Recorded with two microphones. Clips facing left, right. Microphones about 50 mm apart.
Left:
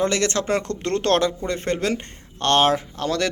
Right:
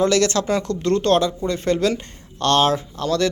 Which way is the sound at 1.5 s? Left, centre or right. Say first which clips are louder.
Right 3 dB; left.